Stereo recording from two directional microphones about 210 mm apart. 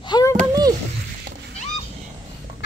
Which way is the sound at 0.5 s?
20° right (ahead or behind).